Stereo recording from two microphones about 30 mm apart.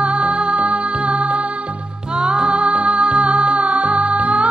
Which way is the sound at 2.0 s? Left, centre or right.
Right.